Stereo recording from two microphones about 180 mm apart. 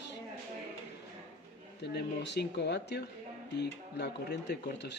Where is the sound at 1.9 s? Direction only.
70° left (ahead or behind).